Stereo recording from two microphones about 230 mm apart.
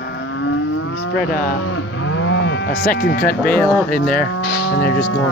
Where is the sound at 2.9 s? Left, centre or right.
Left.